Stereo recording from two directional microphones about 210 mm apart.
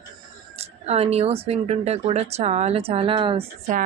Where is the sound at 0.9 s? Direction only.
30° right (ahead or behind).